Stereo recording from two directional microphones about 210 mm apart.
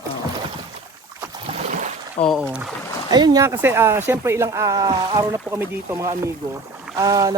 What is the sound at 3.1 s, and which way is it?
Speech, 20° right (ahead or behind).